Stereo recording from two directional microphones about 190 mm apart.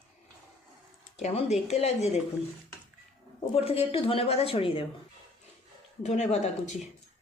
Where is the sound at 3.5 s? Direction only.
30° left (ahead or behind).